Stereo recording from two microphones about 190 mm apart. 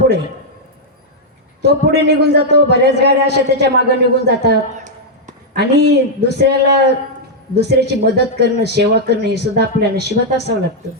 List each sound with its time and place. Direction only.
1.6 s speech: 60° right (ahead or behind)